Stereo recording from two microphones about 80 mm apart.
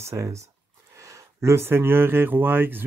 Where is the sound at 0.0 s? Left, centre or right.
Right.